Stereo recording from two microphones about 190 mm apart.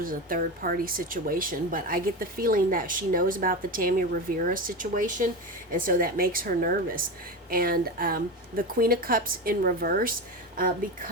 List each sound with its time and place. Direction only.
0.0 s speech: 50° right (ahead or behind)